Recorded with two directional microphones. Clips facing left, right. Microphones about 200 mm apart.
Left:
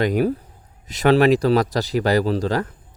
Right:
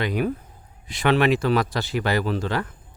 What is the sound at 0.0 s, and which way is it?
Speech, 40° left (ahead or behind).